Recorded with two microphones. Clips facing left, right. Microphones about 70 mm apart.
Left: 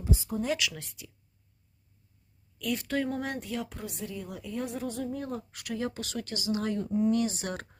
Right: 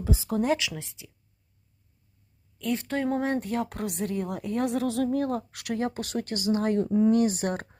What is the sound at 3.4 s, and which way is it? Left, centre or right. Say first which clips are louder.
Speech: right 6 dB; right.